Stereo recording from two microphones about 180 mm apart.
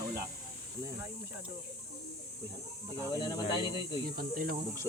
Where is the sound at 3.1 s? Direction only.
20° left (ahead or behind).